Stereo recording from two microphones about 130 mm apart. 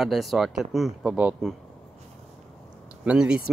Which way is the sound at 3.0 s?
5° right (ahead or behind).